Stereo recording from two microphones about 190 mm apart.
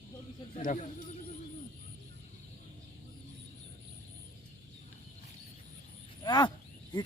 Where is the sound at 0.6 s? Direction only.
45° left (ahead or behind).